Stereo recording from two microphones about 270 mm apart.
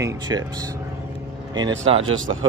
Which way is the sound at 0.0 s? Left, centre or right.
Centre.